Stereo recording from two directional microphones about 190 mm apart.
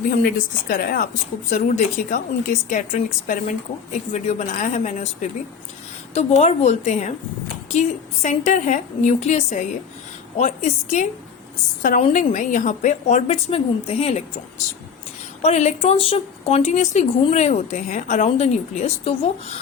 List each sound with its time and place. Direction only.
0.1 s speech: 50° left (ahead or behind)
6.1 s a woman's voice: 35° left (ahead or behind)